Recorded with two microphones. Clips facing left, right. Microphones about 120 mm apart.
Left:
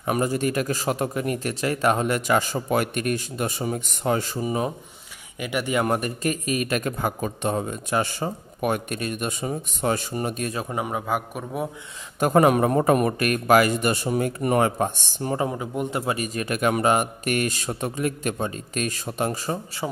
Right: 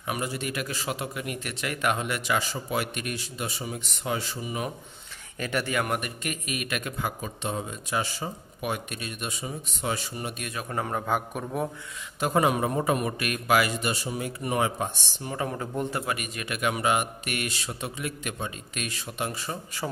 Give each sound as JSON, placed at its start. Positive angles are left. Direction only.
{"t": 0.0, "sound": "a man's voice", "side_deg": 45}
{"t": 5.4, "sound": "a man's voice", "side_deg": 15}
{"t": 5.9, "sound": "a man's voice", "side_deg": 35}
{"t": 10.7, "sound": "a man's voice", "side_deg": 10}
{"t": 12.2, "sound": "a man's voice", "side_deg": 55}
{"t": 15.5, "sound": "a man's voice", "side_deg": 10}
{"t": 16.0, "sound": "speech", "side_deg": 30}
{"t": 19.8, "sound": "speech", "side_deg": 20}